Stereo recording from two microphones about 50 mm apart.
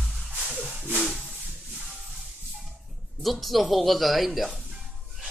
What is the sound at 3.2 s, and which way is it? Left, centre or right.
A man's voice, centre.